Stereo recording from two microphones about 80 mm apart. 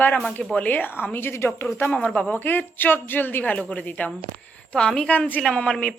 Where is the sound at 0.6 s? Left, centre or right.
Left.